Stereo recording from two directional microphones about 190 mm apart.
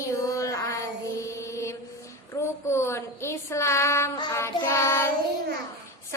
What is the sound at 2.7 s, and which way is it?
Child singing, 15° left (ahead or behind).